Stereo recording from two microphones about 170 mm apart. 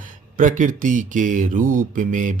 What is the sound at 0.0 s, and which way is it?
Speech, 50° right (ahead or behind).